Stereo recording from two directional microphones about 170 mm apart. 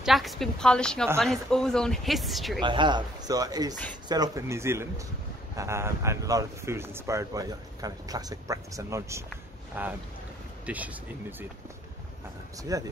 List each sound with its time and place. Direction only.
0.0 s speech: centre (ahead or behind)
2.6 s speech: 30° right (ahead or behind); by 11.4 s 10° right (ahead or behind)
12.7 s speech: 20° right (ahead or behind)